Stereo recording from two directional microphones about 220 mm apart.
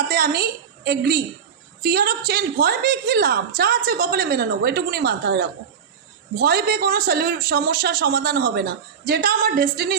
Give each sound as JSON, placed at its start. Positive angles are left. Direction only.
{"t": 0.1, "sound": "a woman's voice", "side_deg": -45}